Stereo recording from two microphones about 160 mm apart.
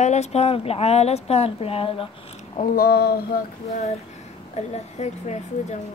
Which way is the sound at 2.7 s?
70° left (ahead or behind).